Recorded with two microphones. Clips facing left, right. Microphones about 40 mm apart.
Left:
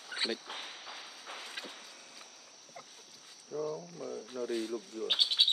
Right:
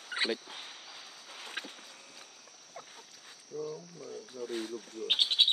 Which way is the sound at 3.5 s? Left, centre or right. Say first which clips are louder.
Left 2 dB; left.